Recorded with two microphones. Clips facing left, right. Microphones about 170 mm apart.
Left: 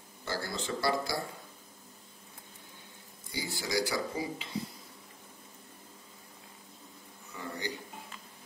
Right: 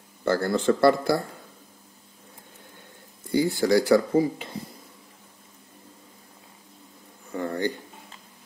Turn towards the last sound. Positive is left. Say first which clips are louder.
# right 12 dB
turn(degrees=-55)  # may be behind; listen again after turning